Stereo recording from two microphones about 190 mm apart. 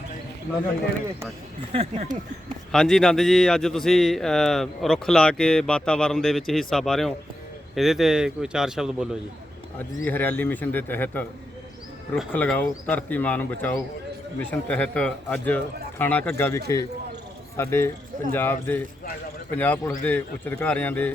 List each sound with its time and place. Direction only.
1.7 s speech: 30° right (ahead or behind)
2.7 s a man's voice: centre (ahead or behind)
9.7 s speech: 10° left (ahead or behind)
12.3 s speech: 10° left (ahead or behind)
17.6 s speech: 15° left (ahead or behind)